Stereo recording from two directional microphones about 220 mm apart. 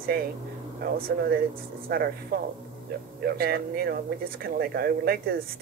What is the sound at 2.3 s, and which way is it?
Speech, 45° right (ahead or behind).